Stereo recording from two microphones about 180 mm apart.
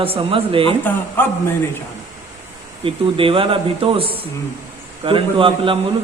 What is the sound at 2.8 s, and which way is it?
A man's voice, 30° right (ahead or behind).